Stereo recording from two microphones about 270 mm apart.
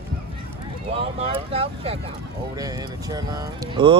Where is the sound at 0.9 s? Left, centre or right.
Right.